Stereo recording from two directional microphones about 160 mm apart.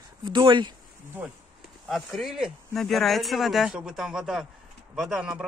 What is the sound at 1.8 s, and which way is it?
Speech, centre (ahead or behind).